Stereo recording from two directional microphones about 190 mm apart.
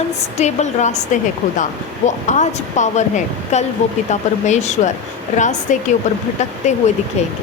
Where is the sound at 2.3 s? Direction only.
40° left (ahead or behind).